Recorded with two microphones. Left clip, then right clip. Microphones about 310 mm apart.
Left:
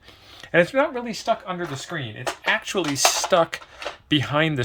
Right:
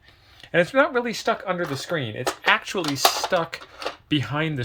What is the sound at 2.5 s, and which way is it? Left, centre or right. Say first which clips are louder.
Speech: right 1 dB; centre.